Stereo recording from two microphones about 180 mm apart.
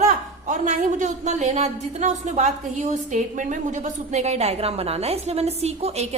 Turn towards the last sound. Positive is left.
turn(degrees=-35)  # may be behind; listen again after turning